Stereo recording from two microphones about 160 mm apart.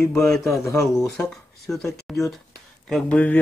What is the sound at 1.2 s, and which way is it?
Speech, centre (ahead or behind).